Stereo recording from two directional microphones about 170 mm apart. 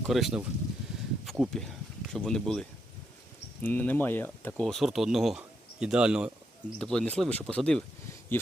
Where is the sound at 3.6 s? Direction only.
10° left (ahead or behind).